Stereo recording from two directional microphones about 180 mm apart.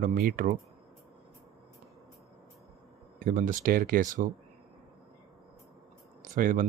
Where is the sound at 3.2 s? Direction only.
45° right (ahead or behind).